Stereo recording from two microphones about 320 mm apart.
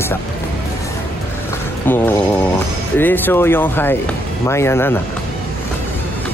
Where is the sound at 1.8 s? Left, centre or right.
Centre.